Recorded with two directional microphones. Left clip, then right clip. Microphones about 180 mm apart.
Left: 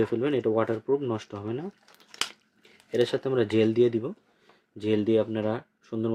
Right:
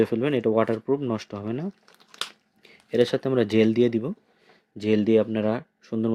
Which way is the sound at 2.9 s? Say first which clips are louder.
Right 3 dB; 50° right (ahead or behind).